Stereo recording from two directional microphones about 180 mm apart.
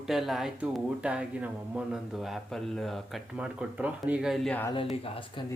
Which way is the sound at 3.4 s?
5° right (ahead or behind).